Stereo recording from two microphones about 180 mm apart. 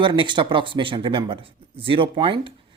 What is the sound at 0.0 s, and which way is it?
Speech, 25° right (ahead or behind).